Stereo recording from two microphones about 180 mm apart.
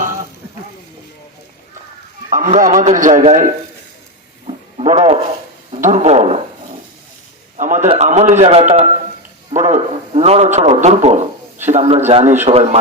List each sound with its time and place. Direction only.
2.3 s a man's voice: 45° right (ahead or behind)
4.4 s a sound: 35° right (ahead or behind)
5.7 s a man's voice: 40° right (ahead or behind)
7.5 s a man's voice: 45° right (ahead or behind)